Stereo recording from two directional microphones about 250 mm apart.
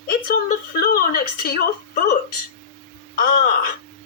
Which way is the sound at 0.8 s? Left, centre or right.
Left.